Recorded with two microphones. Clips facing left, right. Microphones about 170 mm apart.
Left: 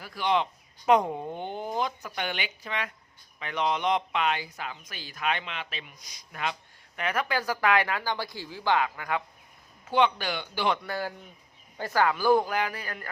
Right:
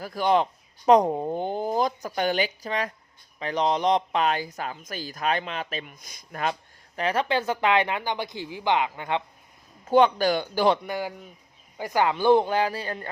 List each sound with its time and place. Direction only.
0.0 s speech: 40° right (ahead or behind); by 9.2 s 25° right (ahead or behind)
9.8 s speech: 40° right (ahead or behind)
10.8 s a man's voice: 15° right (ahead or behind)